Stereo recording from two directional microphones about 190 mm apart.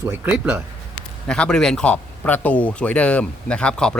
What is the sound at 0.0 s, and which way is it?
Speech, 10° right (ahead or behind).